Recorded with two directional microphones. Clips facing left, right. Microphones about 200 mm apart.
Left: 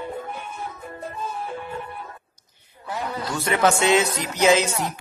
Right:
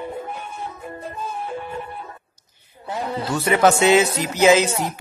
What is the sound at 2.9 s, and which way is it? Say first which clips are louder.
Speech: right 3 dB; 25° right (ahead or behind).